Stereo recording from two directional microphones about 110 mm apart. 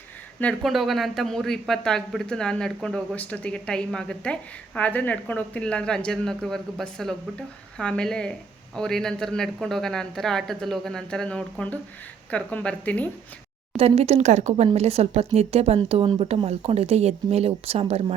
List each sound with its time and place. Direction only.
0.6 s speech: centre (ahead or behind)
13.7 s speech: 65° right (ahead or behind)